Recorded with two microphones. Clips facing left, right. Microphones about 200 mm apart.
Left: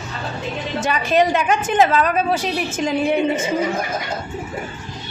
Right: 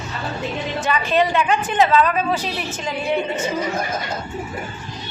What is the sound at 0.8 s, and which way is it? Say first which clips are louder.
A woman's voice: left 2 dB; 45° left (ahead or behind).